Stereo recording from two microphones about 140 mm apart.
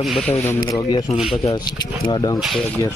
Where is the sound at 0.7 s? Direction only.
30° left (ahead or behind).